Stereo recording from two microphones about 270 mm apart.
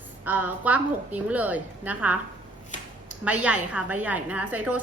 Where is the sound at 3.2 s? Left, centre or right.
Centre.